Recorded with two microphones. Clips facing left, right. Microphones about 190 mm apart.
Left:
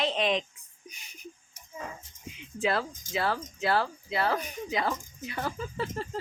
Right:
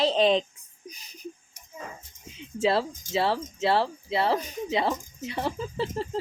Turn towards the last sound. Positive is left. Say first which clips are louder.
# right 4 dB
turn(degrees=-30)  # may be behind; listen again after turning